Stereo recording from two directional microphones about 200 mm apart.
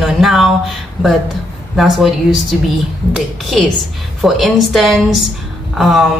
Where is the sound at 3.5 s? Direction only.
Centre (ahead or behind).